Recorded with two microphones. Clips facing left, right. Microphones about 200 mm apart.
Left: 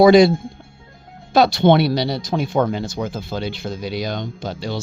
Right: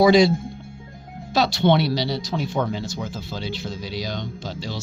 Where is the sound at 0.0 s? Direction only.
55° left (ahead or behind).